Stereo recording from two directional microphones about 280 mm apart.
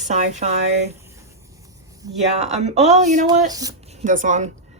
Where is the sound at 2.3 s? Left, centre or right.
Right.